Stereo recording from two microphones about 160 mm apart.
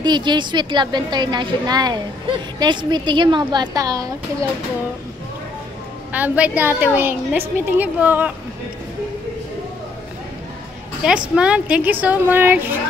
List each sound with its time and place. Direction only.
0.0 s a woman's voice: 25° right (ahead or behind)
6.1 s a woman's voice: 10° right (ahead or behind)
11.1 s a woman's voice: 5° right (ahead or behind)